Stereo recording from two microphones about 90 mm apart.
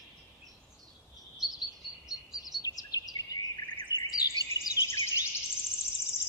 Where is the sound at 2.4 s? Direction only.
45° left (ahead or behind).